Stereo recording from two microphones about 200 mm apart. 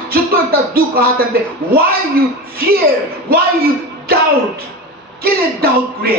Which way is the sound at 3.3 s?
50° right (ahead or behind).